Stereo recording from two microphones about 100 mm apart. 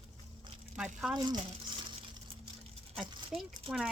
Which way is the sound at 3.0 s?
5° right (ahead or behind).